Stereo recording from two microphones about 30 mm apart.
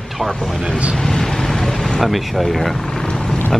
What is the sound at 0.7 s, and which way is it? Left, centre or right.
Speech, right.